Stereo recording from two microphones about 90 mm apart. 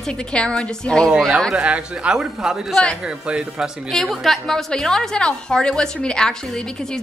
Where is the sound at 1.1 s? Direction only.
5° right (ahead or behind).